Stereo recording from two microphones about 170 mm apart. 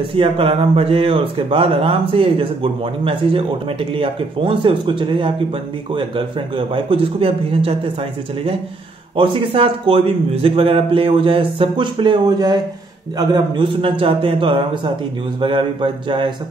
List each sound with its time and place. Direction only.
0.1 s speech: 35° right (ahead or behind)
9.1 s speech: 30° right (ahead or behind)